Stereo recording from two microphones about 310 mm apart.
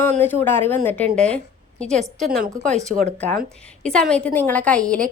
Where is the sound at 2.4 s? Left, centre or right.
Right.